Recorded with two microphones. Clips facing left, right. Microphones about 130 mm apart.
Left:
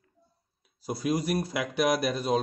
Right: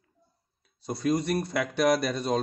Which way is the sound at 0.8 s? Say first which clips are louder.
Right 2 dB; 5° left (ahead or behind).